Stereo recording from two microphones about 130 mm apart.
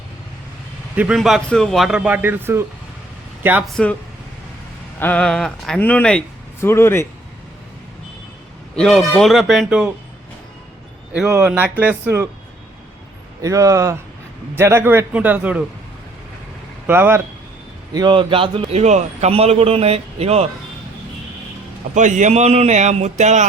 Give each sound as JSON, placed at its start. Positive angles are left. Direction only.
{"t": 0.9, "sound": "a man's voice", "side_deg": -5}
{"t": 2.0, "sound": "a man's voice", "side_deg": -10}
{"t": 3.7, "sound": "speech", "side_deg": 5}
{"t": 4.9, "sound": "speech", "side_deg": 10}
{"t": 6.6, "sound": "speech", "side_deg": 20}
{"t": 8.7, "sound": "a man's voice", "side_deg": 5}
{"t": 11.5, "sound": "a man's voice", "side_deg": -15}
{"t": 13.4, "sound": "a man's voice", "side_deg": -25}
{"t": 16.8, "sound": "a man's voice", "side_deg": -15}
{"t": 17.9, "sound": "speech", "side_deg": -35}
{"t": 18.7, "sound": "speech", "side_deg": -60}
{"t": 21.9, "sound": "a man's voice", "side_deg": -70}